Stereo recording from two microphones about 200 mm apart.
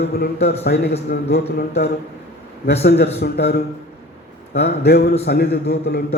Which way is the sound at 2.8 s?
55° left (ahead or behind).